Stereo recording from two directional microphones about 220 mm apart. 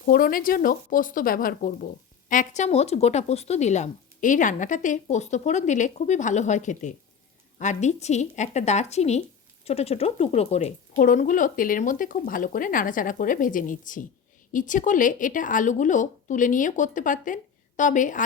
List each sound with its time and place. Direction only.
0.0 s speech: 40° left (ahead or behind)